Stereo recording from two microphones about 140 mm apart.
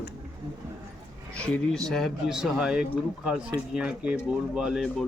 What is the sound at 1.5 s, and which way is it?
Speech, 5° left (ahead or behind).